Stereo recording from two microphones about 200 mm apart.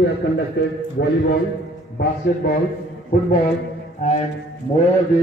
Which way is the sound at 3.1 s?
50° left (ahead or behind).